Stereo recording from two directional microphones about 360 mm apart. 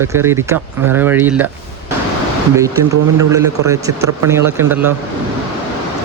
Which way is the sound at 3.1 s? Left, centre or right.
Centre.